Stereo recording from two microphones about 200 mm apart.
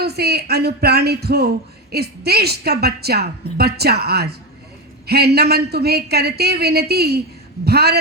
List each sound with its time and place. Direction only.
0.0 s speech: 55° right (ahead or behind)